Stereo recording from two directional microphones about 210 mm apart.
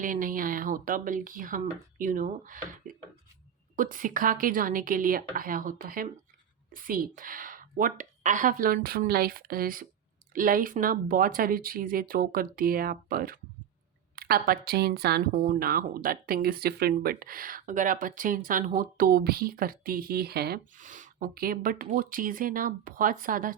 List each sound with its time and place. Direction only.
0.0 s a woman's voice: 40° right (ahead or behind)